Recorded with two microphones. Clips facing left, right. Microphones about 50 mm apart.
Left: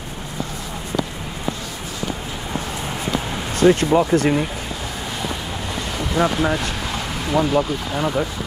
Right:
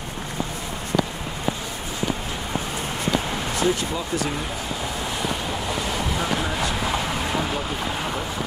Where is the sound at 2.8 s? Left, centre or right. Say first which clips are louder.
Right 1 dB; centre.